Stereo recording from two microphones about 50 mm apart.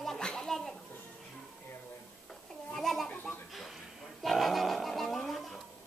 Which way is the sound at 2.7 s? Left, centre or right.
Centre.